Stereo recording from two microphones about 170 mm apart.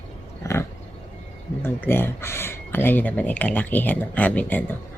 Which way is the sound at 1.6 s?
15° left (ahead or behind).